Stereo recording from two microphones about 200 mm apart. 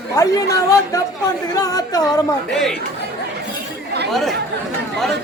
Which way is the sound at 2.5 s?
Centre (ahead or behind).